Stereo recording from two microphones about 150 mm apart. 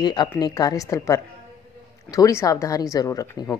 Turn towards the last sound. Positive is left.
turn(degrees=20)  # may be behind; listen again after turning